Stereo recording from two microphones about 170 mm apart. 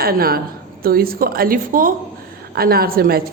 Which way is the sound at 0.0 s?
60° right (ahead or behind).